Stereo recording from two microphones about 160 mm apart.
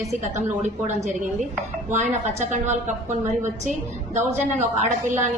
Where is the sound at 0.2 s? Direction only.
45° right (ahead or behind).